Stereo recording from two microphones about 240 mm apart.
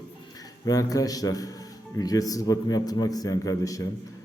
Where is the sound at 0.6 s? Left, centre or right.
Centre.